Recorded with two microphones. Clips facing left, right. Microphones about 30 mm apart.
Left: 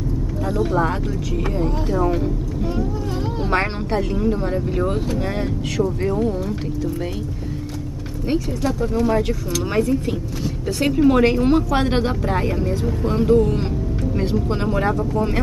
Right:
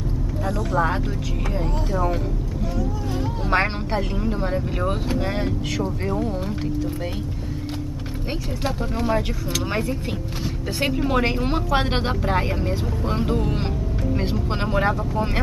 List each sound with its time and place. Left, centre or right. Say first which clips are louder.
1.9 s speech: left 3 dB; centre
3.4 s speech: even; centre
6.0 s speech: left 4 dB; centre
9.1 s speech: left 3 dB; centre
11.0 s speech: left 9 dB; centre